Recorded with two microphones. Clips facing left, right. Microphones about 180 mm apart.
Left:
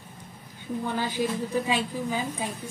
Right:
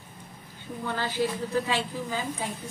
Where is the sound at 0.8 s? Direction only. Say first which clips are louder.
Even; 15° left (ahead or behind).